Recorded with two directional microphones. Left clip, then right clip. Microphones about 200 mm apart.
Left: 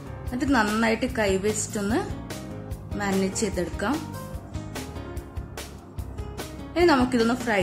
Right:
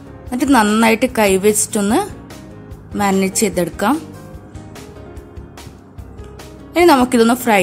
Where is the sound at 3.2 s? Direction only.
45° right (ahead or behind).